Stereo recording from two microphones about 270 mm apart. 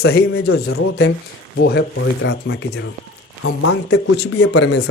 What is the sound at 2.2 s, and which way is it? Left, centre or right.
Speech, left.